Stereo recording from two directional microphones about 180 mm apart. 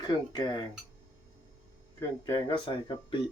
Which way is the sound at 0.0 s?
20° left (ahead or behind).